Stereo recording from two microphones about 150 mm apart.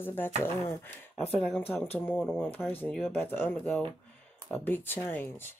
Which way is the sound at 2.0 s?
10° left (ahead or behind).